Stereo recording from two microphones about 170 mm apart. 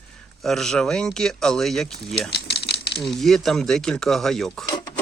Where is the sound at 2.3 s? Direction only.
85° left.